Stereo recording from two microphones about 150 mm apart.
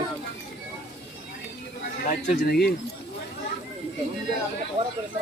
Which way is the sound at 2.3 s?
90° left.